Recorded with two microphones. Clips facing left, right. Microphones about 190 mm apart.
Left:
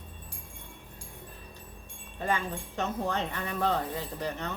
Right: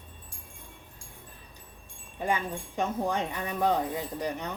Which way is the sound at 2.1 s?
10° right (ahead or behind).